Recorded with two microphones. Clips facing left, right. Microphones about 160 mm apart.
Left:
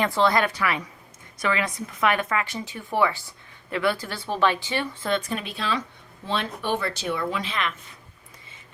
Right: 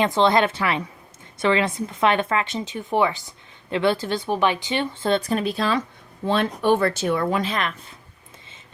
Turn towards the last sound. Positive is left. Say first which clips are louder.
# right 5 dB
turn(degrees=-40)  # may be behind; listen again after turning